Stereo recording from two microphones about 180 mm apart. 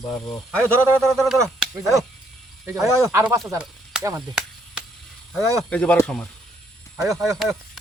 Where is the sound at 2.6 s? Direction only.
15° right (ahead or behind).